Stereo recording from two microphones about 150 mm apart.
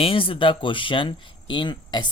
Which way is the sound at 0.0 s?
35° left (ahead or behind).